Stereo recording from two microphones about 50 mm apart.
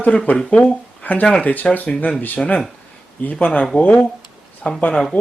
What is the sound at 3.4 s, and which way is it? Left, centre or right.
Speech, left.